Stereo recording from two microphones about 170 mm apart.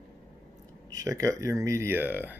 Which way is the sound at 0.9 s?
20° right (ahead or behind).